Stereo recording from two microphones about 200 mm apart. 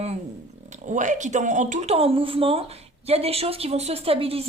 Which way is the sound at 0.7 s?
40° right (ahead or behind).